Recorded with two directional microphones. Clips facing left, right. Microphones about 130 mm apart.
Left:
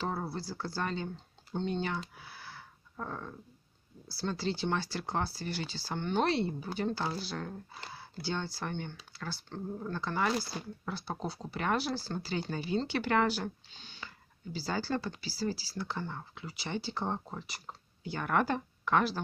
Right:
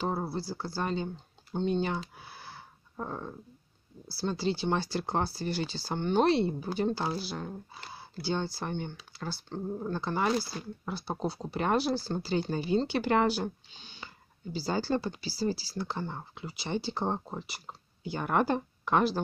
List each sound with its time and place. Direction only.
0.0 s speech: 20° right (ahead or behind)
8.6 s speech: 25° right (ahead or behind)
12.3 s speech: 30° right (ahead or behind)
17.5 s speech: 10° right (ahead or behind)
18.2 s speech: 20° right (ahead or behind)